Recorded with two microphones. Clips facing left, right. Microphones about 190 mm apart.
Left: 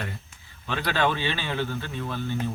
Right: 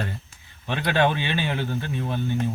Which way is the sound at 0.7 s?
20° right (ahead or behind).